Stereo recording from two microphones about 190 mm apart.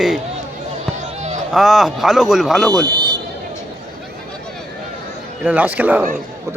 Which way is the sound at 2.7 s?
20° right (ahead or behind).